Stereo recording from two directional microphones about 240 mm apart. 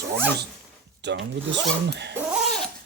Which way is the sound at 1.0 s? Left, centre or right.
Right.